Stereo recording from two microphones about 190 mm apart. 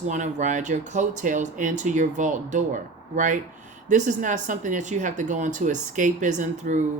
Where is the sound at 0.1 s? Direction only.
40° right (ahead or behind).